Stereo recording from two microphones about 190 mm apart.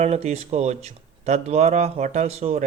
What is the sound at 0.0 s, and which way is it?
Speech, 35° right (ahead or behind).